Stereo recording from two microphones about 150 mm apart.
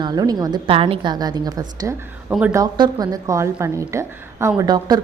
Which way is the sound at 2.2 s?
10° right (ahead or behind).